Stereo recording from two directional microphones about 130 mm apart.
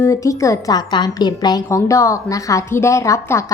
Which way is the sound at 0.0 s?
25° left (ahead or behind).